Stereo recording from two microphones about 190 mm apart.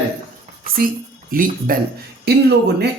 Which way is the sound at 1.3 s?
50° right (ahead or behind).